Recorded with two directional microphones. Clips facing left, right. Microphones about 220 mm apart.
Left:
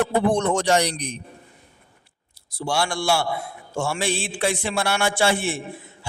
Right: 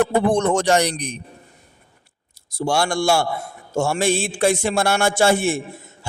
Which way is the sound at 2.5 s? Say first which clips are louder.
Right 4 dB; 45° right (ahead or behind).